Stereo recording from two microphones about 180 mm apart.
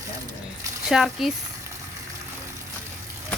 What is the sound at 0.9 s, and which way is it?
Speech, centre (ahead or behind).